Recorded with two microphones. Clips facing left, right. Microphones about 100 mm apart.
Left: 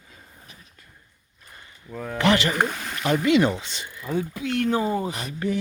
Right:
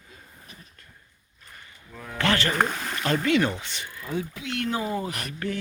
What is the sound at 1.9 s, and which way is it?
Speech, 55° left (ahead or behind).